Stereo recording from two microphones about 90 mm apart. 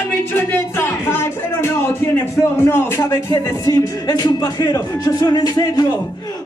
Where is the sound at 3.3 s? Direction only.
45° left (ahead or behind).